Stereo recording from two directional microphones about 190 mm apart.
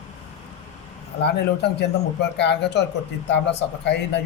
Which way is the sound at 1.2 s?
60° left (ahead or behind).